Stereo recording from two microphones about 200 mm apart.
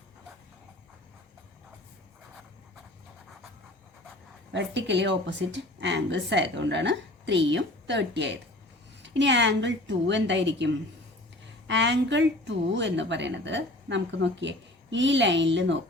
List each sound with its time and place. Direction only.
4.5 s a woman's voice: 60° right (ahead or behind)